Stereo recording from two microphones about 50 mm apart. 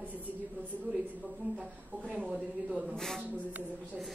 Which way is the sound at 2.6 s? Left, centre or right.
Centre.